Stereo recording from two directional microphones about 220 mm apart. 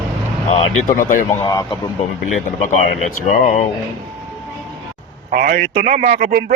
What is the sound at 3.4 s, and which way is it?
Speech, 35° left (ahead or behind).